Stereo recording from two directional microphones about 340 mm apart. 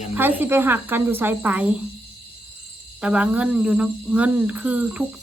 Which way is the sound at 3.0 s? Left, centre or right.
Centre.